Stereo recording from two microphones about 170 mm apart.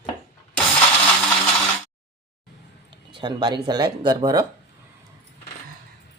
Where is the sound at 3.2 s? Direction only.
25° right (ahead or behind).